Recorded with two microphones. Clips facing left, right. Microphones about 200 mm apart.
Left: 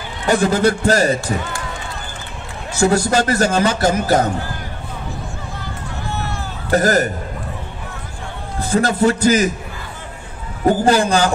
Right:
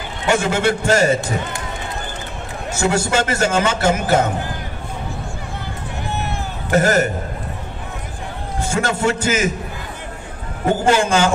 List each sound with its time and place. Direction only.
0.3 s a man's voice: 35° left (ahead or behind)
2.8 s a man's voice: 35° left (ahead or behind)
6.7 s a man's voice: 35° left (ahead or behind)
8.6 s a man's voice: 35° left (ahead or behind)
10.7 s a man's voice: 35° left (ahead or behind)